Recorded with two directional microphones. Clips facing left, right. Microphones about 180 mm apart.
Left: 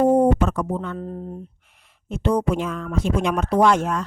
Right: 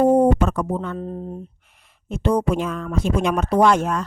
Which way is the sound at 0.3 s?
40° right (ahead or behind).